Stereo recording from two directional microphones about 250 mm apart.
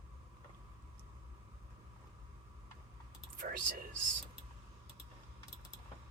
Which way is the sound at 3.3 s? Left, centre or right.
Right.